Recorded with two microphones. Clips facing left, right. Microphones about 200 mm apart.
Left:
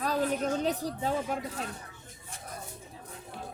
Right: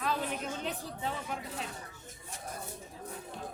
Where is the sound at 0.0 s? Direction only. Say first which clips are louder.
Left 6 dB; 40° left (ahead or behind).